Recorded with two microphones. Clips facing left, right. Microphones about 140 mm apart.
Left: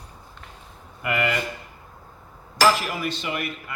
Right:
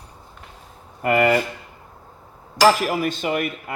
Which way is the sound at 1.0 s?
45° right (ahead or behind).